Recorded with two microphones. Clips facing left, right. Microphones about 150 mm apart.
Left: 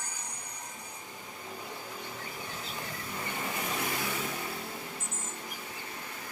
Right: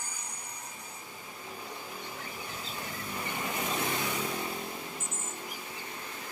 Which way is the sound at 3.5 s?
25° right (ahead or behind).